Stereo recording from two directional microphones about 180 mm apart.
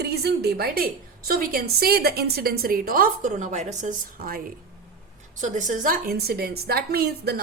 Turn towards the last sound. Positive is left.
turn(degrees=-60)  # may be behind; listen again after turning